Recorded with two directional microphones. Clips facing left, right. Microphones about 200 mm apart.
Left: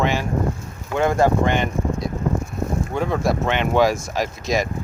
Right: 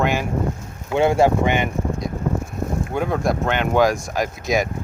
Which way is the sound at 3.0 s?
Centre (ahead or behind).